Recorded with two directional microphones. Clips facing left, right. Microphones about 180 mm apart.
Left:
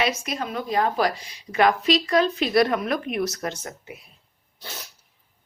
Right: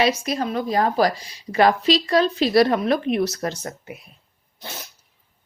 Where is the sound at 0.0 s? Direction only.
35° right (ahead or behind).